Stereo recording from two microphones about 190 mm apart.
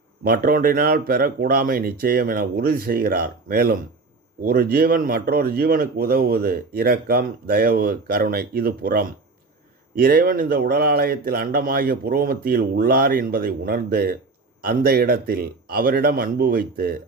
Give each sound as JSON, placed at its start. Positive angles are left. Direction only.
{"t": 0.3, "sound": "speech", "side_deg": -50}